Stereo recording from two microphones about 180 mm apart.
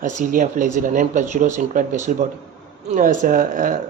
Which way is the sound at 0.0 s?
45° right (ahead or behind).